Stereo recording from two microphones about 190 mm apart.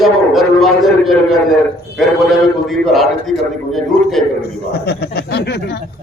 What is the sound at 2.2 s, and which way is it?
A man's voice, centre (ahead or behind).